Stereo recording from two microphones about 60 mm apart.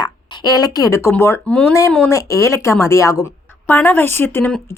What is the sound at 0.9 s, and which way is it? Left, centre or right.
Speech, left.